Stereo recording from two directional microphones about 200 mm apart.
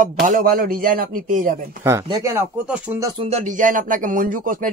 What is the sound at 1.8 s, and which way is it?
Speech, 15° right (ahead or behind).